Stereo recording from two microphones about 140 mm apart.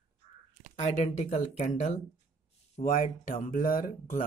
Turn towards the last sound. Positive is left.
turn(degrees=90)